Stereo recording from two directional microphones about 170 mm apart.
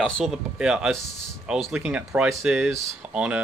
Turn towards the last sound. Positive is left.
turn(degrees=-5)  # may be behind; listen again after turning